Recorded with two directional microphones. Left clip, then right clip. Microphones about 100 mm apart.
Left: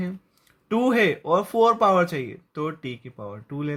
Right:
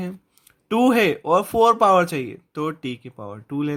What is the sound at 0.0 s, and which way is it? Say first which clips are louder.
Speech: right 1 dB; 55° right (ahead or behind).